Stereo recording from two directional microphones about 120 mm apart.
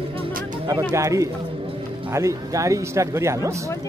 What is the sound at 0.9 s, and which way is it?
Speech, 25° right (ahead or behind).